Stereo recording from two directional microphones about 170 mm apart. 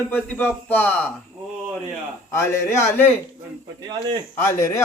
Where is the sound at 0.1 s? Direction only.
10° left (ahead or behind).